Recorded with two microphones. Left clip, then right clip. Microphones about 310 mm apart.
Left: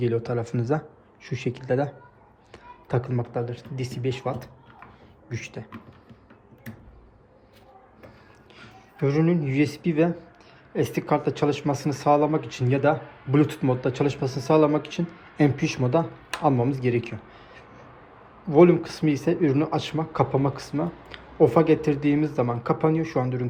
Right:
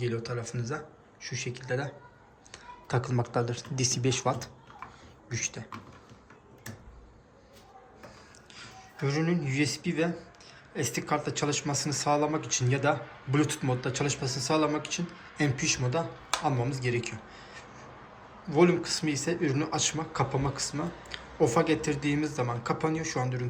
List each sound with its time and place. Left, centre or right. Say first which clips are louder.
0.0 s speech: left 8 dB; centre
8.5 s speech: left 3 dB; centre